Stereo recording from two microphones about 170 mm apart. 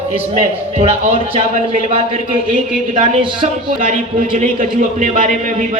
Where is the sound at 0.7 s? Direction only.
35° right (ahead or behind).